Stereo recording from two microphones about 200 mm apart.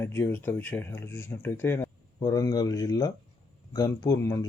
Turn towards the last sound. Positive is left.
turn(degrees=15)  # may be behind; listen again after turning